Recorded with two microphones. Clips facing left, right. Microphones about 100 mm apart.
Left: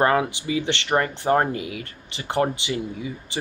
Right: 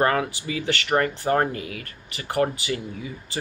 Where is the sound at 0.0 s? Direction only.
20° left (ahead or behind).